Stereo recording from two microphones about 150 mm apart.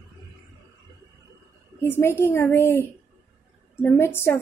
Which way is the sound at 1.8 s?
15° left (ahead or behind).